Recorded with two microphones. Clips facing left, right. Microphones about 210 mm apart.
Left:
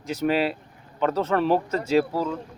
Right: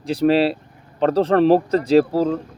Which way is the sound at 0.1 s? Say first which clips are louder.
Right 7 dB; 35° right (ahead or behind).